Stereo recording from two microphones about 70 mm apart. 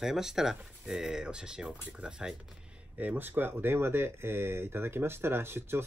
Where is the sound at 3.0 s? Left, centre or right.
Right.